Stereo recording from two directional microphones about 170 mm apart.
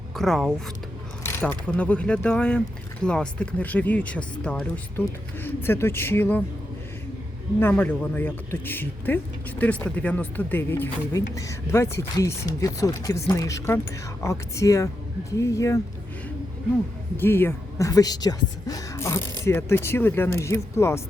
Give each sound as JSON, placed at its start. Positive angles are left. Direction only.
{"t": 0.2, "sound": "speech", "side_deg": 0}
{"t": 1.2, "sound": "speech", "side_deg": 10}
{"t": 7.6, "sound": "speech", "side_deg": 10}
{"t": 17.2, "sound": "speech", "side_deg": 15}